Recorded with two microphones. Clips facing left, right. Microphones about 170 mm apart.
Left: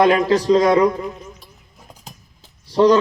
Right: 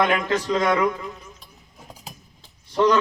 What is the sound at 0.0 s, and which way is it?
A man's voice, 35° left (ahead or behind).